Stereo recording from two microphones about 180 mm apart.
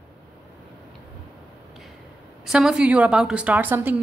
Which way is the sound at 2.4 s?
Centre (ahead or behind).